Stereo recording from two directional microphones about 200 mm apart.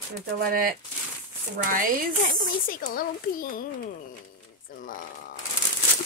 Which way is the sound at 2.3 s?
40° left (ahead or behind).